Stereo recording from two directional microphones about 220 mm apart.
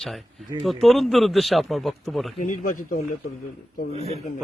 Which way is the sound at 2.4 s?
35° left (ahead or behind).